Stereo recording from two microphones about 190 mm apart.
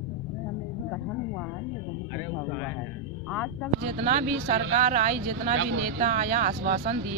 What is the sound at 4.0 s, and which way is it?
Speech, 35° right (ahead or behind).